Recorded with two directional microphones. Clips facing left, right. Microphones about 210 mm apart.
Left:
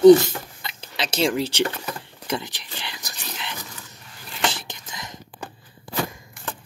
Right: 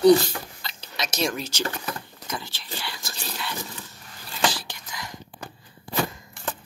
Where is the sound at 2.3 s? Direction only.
20° left (ahead or behind).